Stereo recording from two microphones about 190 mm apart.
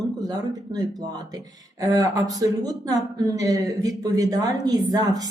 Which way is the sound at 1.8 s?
20° right (ahead or behind).